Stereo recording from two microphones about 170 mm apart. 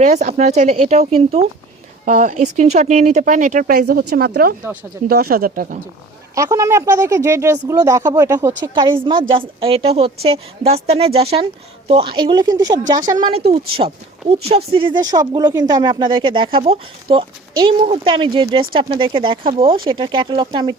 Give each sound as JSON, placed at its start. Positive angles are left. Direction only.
{"t": 0.0, "sound": "a woman's voice", "side_deg": -45}
{"t": 6.3, "sound": "speech", "side_deg": -15}
{"t": 8.6, "sound": "a woman's voice", "side_deg": -25}